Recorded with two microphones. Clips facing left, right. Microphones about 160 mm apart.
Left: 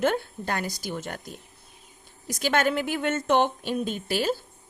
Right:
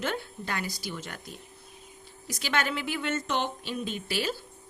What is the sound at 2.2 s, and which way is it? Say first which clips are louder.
A woman's voice: left 6 dB; 45° left (ahead or behind).